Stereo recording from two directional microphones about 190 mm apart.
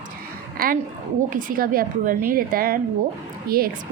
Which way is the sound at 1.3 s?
45° right (ahead or behind).